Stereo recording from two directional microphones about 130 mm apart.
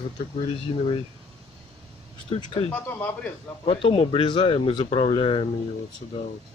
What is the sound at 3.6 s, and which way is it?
Speech, 45° left (ahead or behind).